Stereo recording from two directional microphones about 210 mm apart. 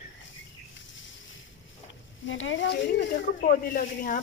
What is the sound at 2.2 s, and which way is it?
Speech, 65° left (ahead or behind).